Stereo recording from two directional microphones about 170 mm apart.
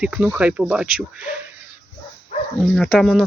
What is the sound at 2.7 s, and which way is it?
Speech, 5° left (ahead or behind).